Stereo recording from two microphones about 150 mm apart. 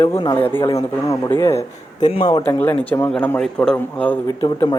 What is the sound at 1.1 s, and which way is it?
Speech, 15° left (ahead or behind).